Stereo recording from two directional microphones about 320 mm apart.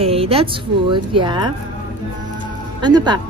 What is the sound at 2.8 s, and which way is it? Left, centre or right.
Speech, centre.